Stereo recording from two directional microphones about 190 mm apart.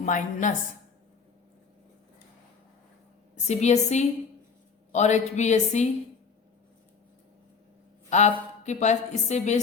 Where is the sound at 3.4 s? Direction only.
35° left (ahead or behind).